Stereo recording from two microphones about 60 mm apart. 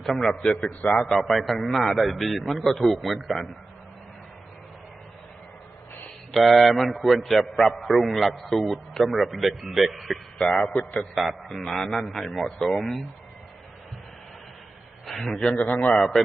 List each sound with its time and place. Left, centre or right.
0.0 s a man's voice: centre
1.0 s a man's voice: centre
6.3 s a man's voice: centre
10.3 s a man's voice: centre
11.1 s a man's voice: centre
15.0 s a man's voice: centre
15.4 s a man's voice: centre
16.0 s a man's voice: centre